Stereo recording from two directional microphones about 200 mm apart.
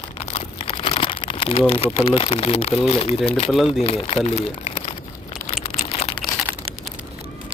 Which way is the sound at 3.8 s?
30° left (ahead or behind).